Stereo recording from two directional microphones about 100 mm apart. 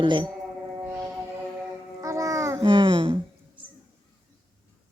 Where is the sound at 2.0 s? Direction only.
30° right (ahead or behind).